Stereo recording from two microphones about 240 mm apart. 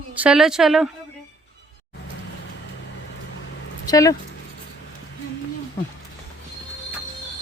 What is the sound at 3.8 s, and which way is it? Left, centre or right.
Speech, centre.